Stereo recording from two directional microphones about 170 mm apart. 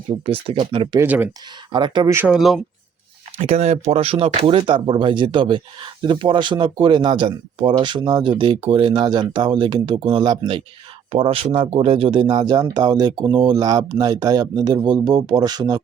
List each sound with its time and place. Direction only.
0.3 s speech: 30° right (ahead or behind)
0.9 s speech: 10° right (ahead or behind)
1.7 s speech: 25° right (ahead or behind)
2.1 s speech: 5° right (ahead or behind)
3.3 s speech: 40° right (ahead or behind)